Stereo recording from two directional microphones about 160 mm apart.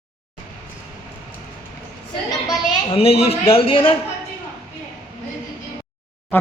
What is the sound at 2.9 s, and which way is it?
A man's voice, 35° left (ahead or behind).